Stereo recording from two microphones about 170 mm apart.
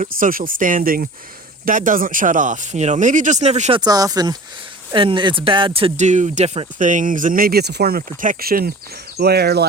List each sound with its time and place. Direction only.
0.0 s speech: 55° right (ahead or behind)
3.8 s speech: 20° right (ahead or behind); by 9.6 s 70° right (ahead or behind)